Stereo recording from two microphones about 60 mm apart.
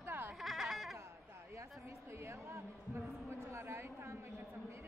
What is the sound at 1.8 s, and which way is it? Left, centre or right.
A woman's voice, right.